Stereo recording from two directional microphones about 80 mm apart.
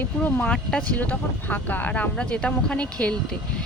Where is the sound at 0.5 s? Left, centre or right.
Centre.